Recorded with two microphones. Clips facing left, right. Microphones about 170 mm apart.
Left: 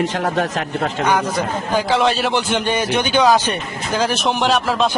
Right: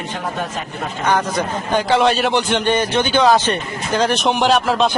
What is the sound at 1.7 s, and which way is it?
A man's voice, centre (ahead or behind).